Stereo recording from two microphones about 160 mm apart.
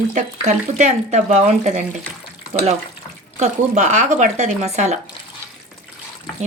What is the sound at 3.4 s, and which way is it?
Speech, 45° right (ahead or behind).